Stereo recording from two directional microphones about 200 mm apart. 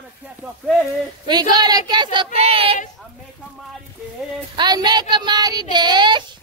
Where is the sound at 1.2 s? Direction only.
20° right (ahead or behind).